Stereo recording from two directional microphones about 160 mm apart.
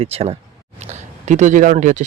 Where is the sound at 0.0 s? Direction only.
40° right (ahead or behind).